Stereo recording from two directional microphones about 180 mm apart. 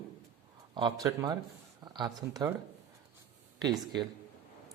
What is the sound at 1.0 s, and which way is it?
Speech, 20° right (ahead or behind).